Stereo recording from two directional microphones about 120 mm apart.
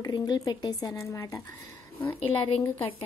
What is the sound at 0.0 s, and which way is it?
Speech, 35° left (ahead or behind).